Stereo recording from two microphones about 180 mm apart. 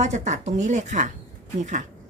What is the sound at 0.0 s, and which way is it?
A woman's voice, 40° right (ahead or behind).